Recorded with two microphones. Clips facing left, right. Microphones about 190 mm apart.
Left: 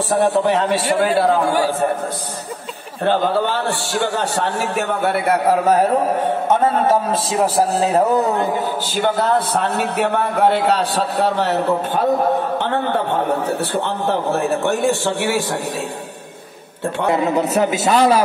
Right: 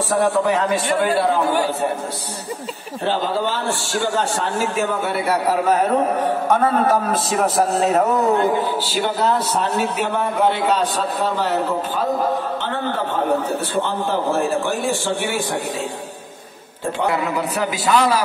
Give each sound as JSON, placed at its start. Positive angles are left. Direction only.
{"t": 0.1, "sound": "a man's voice", "side_deg": 30}
{"t": 3.5, "sound": "a man's voice", "side_deg": 60}
{"t": 6.9, "sound": "a man's voice", "side_deg": 30}
{"t": 9.0, "sound": "a man's voice", "side_deg": 55}
{"t": 17.1, "sound": "a man's voice", "side_deg": 25}